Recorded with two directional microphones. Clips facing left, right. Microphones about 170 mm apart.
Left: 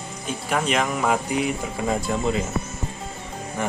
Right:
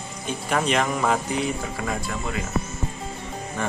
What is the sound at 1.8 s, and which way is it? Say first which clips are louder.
Speech: left 7 dB; 20° left (ahead or behind).